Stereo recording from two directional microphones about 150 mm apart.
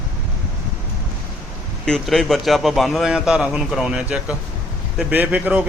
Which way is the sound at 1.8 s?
5° left (ahead or behind).